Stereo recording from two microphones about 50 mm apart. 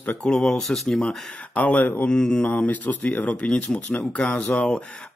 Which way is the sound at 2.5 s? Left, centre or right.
Left.